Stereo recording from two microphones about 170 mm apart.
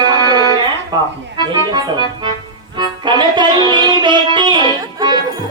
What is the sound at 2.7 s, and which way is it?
Music, 25° right (ahead or behind).